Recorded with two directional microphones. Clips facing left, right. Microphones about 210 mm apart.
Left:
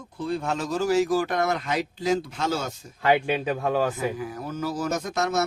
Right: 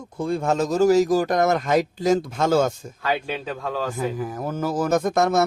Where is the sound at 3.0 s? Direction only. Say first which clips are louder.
Left 4 dB; 20° left (ahead or behind).